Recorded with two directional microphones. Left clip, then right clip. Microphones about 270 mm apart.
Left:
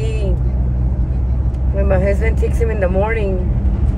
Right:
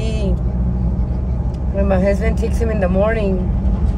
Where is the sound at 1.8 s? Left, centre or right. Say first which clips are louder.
Right 1 dB; centre.